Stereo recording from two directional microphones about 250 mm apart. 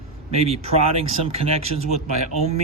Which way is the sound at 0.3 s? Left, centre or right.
Right.